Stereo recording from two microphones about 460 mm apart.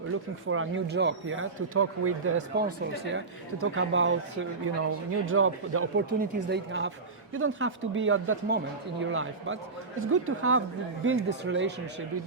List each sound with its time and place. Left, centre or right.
0.4 s speech: right